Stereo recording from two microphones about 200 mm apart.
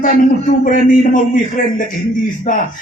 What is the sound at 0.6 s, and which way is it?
A man's voice, 40° left (ahead or behind).